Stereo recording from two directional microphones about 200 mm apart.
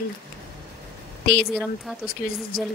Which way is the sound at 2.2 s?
45° left (ahead or behind).